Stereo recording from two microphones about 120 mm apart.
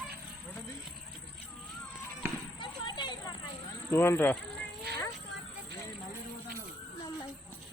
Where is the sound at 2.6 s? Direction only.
40° left (ahead or behind).